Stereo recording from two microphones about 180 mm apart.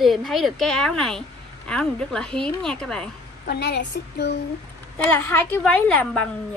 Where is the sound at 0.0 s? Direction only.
Centre (ahead or behind).